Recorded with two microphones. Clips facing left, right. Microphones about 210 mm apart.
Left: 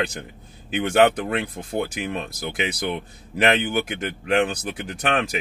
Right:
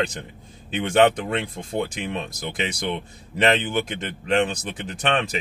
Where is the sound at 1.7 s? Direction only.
10° left (ahead or behind).